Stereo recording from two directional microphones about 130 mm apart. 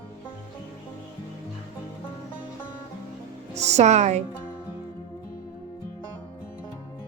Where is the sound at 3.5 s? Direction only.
60° right (ahead or behind).